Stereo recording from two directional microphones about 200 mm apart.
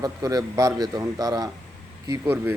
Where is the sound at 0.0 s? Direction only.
20° right (ahead or behind).